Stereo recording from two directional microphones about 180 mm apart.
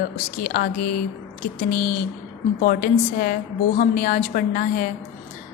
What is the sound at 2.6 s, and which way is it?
A woman's voice, 50° left (ahead or behind).